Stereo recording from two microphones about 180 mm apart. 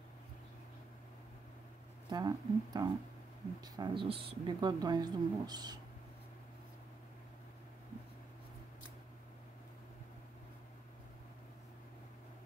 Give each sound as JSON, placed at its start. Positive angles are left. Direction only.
{"t": 2.0, "sound": "speech", "side_deg": -20}